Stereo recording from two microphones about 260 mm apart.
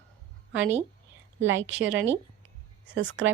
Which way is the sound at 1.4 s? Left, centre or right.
Right.